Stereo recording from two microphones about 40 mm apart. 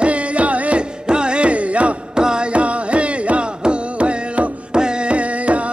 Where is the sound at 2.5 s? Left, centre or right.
Right.